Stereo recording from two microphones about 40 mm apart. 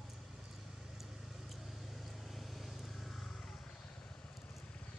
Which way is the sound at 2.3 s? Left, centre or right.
Centre.